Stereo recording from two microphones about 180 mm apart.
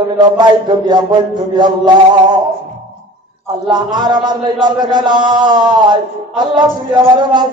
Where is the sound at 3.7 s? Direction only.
25° right (ahead or behind).